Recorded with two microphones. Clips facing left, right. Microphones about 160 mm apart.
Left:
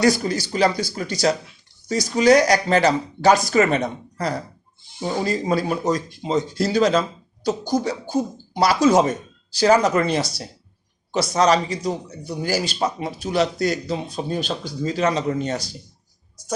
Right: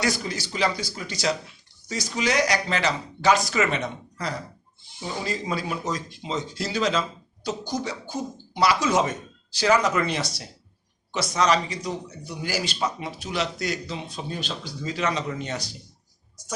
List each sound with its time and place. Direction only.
0.0 s speech: 40° left (ahead or behind)